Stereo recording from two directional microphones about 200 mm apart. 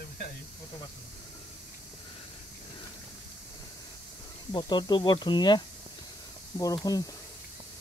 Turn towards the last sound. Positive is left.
turn(degrees=20)  # may be behind; listen again after turning